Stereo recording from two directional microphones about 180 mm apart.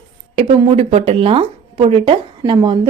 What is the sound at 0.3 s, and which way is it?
A woman's voice, 35° right (ahead or behind).